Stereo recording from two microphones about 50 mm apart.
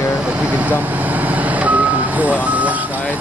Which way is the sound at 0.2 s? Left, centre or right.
Right.